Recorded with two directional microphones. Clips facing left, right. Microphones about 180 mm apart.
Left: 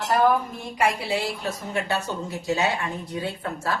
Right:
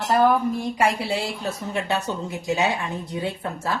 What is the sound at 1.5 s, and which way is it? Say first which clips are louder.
A woman's voice: right 1 dB; 20° right (ahead or behind).